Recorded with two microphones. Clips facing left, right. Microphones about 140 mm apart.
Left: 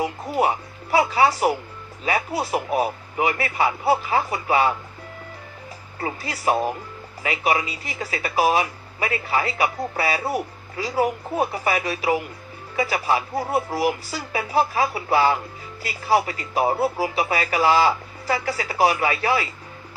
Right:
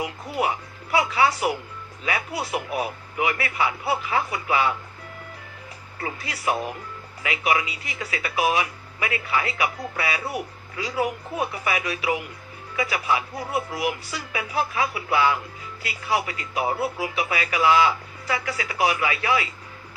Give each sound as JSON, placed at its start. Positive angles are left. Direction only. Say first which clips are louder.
{"t": 0.0, "sound": "speech", "louder": "left 4 dB", "side_deg": 30}
{"t": 6.0, "sound": "speech", "louder": "left 3 dB", "side_deg": 30}